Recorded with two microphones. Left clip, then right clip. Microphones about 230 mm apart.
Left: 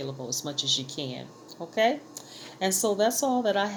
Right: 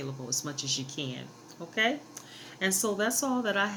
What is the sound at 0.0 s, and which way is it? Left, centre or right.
Speech, centre.